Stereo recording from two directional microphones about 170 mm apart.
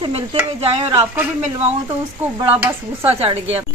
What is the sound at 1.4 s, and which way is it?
Speech, 35° right (ahead or behind).